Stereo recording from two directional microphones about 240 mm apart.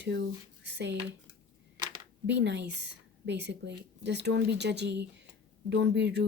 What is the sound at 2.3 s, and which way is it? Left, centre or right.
A woman's voice, right.